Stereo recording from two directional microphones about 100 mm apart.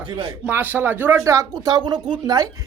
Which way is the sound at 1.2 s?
40° right (ahead or behind).